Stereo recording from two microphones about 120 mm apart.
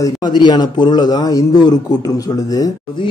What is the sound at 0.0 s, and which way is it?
A man's voice, 35° left (ahead or behind).